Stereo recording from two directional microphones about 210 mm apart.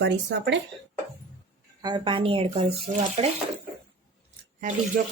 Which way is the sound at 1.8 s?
20° right (ahead or behind).